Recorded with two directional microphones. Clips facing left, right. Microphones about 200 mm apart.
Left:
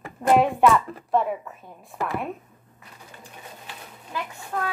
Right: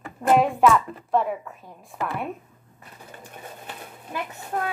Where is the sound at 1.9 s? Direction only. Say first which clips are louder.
Even; 5° left (ahead or behind).